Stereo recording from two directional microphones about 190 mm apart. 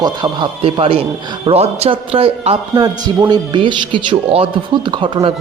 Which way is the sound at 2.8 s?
20° right (ahead or behind).